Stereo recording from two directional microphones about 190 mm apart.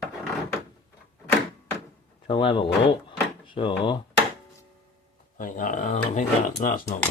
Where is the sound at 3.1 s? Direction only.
25° left (ahead or behind).